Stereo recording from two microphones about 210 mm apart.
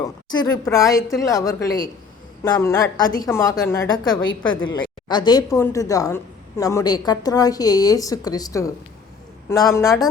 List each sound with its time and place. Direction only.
0.0 s a woman's voice: 20° left (ahead or behind)